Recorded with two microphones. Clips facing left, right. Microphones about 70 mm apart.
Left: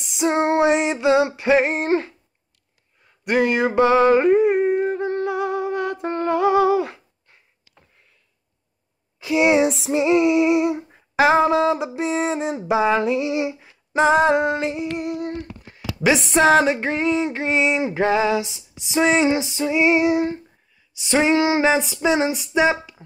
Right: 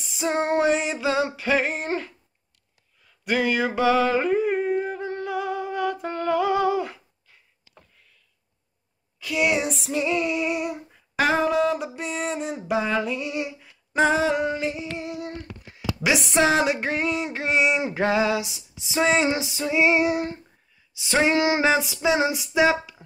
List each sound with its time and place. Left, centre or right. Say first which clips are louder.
0.0 s female singing: left 5 dB; centre
3.0 s a sound: left 5 dB; centre
9.2 s speech: left 7 dB; left
9.7 s female singing: left 6 dB; left
9.9 s female singing: left 8 dB; centre
15.0 s a sound: left 6 dB; left
16.9 s a sound: left 5 dB; centre
17.7 s female singing: left 3 dB; left
22.6 s speech: left 1 dB; left